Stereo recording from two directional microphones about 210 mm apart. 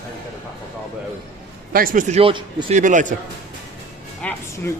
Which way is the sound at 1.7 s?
45° right (ahead or behind).